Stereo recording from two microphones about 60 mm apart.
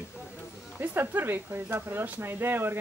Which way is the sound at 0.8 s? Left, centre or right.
Right.